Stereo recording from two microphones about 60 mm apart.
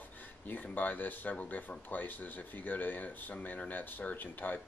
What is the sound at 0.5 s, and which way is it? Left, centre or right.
Speech, left.